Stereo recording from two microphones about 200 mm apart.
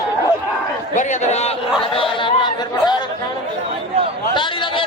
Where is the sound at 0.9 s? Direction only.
35° left (ahead or behind).